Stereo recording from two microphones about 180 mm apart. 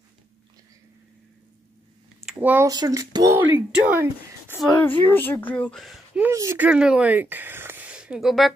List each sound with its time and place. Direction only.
2.3 s speech: 10° right (ahead or behind)
4.8 s speech: 10° left (ahead or behind)
6.2 s speech: 15° right (ahead or behind)